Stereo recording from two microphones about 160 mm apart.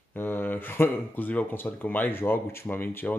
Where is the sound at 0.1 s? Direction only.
10° left (ahead or behind).